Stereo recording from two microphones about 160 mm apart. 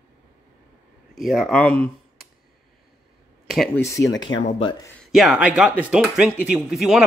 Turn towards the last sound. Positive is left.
turn(degrees=0)  # may be behind; listen again after turning